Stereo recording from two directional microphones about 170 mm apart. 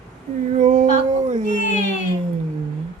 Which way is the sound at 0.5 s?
45° right (ahead or behind).